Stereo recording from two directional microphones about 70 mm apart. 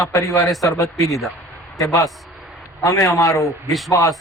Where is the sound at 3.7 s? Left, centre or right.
Centre.